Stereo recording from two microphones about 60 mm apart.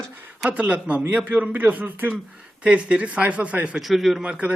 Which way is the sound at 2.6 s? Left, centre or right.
Centre.